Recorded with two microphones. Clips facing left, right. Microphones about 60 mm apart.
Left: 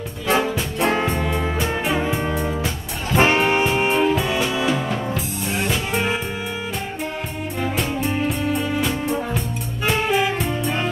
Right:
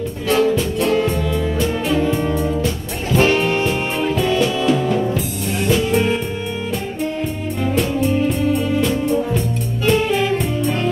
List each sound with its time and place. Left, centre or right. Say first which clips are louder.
0.3 s music: right 4 dB; left
2.3 s music: right 4 dB; centre
3.2 s music: right 1 dB; left; by 5.0 s centre
7.6 s music: right 5 dB; centre